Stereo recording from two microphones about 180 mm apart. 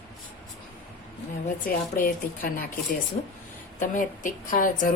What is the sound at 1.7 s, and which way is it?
A woman's voice, 55° left (ahead or behind).